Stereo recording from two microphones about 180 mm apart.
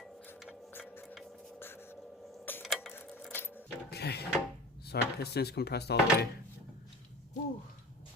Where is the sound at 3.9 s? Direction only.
65° left (ahead or behind).